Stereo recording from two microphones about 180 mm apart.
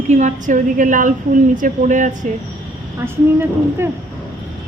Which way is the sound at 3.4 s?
15° right (ahead or behind).